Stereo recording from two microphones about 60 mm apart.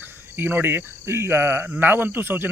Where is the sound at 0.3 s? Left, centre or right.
Right.